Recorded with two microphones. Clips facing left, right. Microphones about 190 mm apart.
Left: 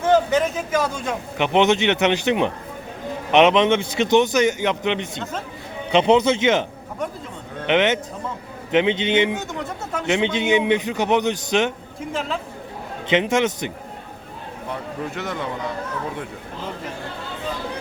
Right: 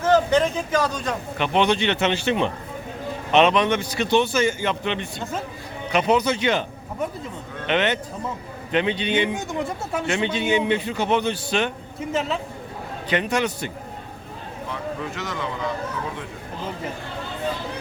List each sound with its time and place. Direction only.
0.0 s speech: 10° left (ahead or behind)
1.4 s speech: 20° left (ahead or behind)
7.7 s speech: 20° left (ahead or behind)
9.6 s speech: 10° right (ahead or behind)
10.1 s speech: 20° left (ahead or behind)
13.1 s speech: 20° left (ahead or behind)
15.1 s speech: 55° left (ahead or behind)